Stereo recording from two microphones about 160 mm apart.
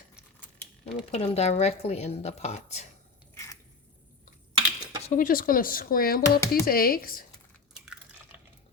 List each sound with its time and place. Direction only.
0.3 s a sound: 5° left (ahead or behind)
1.1 s speech: 40° left (ahead or behind)
3.3 s biting: 20° left (ahead or behind)
5.0 s speech: 55° left (ahead or behind)